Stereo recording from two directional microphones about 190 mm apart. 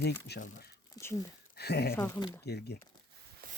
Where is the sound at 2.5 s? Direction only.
60° left (ahead or behind).